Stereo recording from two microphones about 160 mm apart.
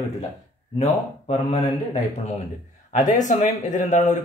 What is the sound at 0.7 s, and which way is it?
Speech, 45° left (ahead or behind).